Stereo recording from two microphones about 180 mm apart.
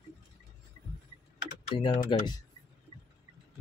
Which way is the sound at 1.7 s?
30° left (ahead or behind).